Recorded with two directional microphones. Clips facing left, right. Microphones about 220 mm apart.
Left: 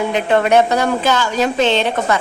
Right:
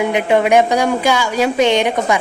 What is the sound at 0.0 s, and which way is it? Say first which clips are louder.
A woman's voice: right 1 dB; 15° right (ahead or behind).